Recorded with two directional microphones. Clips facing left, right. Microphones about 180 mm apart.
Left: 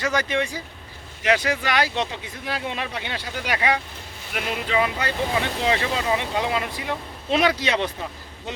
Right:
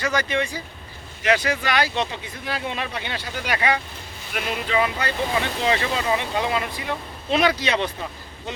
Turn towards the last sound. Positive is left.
turn(degrees=20)  # may be behind; listen again after turning